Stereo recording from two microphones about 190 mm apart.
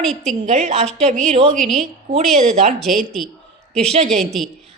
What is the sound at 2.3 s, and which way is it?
Speech, 35° right (ahead or behind).